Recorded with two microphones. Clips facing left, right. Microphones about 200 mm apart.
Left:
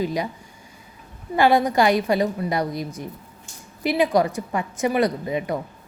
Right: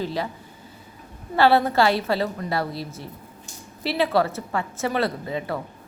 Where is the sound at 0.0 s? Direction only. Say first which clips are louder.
Left 3 dB; 15° left (ahead or behind).